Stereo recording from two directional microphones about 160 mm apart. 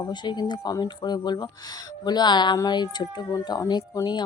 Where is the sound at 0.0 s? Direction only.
30° left (ahead or behind).